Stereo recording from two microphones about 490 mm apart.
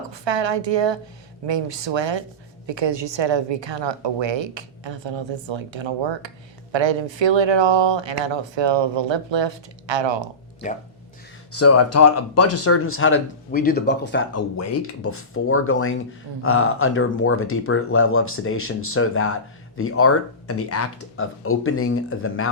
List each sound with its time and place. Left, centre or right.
0.1 s a woman's voice: right
11.5 s speech: left